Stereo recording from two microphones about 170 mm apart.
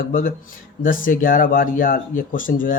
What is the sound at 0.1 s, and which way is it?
Speech, 55° left (ahead or behind).